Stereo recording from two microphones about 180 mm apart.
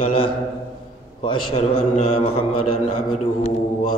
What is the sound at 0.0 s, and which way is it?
A man's voice, 30° left (ahead or behind).